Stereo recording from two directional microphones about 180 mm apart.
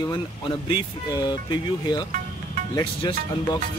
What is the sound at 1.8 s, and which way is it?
Speech, 20° left (ahead or behind).